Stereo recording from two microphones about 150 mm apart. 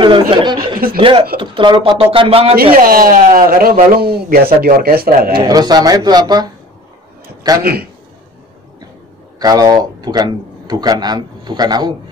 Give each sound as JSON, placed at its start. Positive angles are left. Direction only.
{"t": 0.0, "sound": "speech", "side_deg": -35}
{"t": 2.5, "sound": "speech", "side_deg": -80}
{"t": 5.5, "sound": "speech", "side_deg": -25}
{"t": 7.6, "sound": "a man's voice", "side_deg": -90}
{"t": 9.4, "sound": "speech", "side_deg": -25}